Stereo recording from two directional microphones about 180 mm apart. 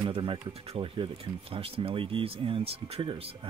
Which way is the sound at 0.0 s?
30° right (ahead or behind).